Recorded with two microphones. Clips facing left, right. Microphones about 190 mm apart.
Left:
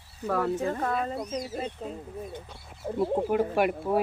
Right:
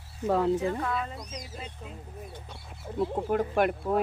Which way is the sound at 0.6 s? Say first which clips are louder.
Left 2 dB; 45° left (ahead or behind).